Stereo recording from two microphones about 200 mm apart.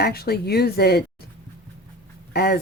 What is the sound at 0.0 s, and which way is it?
Speech, 50° left (ahead or behind).